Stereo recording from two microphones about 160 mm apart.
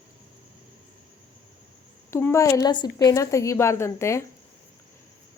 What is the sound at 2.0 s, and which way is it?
A woman's voice, 15° left (ahead or behind).